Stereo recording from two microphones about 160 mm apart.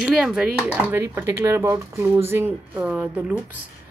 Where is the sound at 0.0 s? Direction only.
5° right (ahead or behind).